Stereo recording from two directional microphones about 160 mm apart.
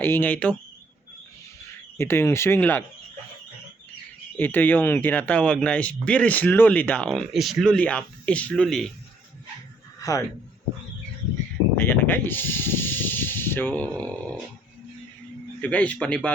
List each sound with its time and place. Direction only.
0.0 s speech: 10° left (ahead or behind)
2.0 s speech: 15° left (ahead or behind)
4.4 s speech: 10° left (ahead or behind)
10.0 s a man's voice: 20° left (ahead or behind)
11.8 s snake: 15° left (ahead or behind)
15.6 s speech: 10° left (ahead or behind)